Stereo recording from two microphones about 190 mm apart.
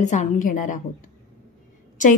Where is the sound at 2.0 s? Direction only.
40° left (ahead or behind).